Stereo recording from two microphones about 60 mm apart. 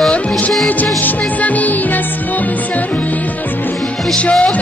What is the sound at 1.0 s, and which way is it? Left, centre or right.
Music, left.